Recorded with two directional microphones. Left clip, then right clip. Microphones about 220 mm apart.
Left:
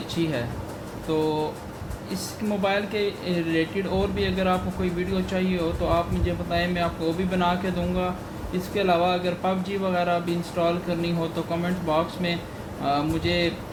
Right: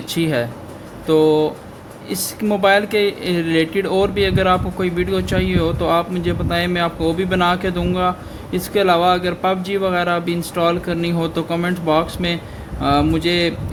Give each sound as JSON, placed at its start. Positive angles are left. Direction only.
{"t": 0.2, "sound": "speech", "side_deg": -50}
{"t": 2.5, "sound": "speech", "side_deg": -50}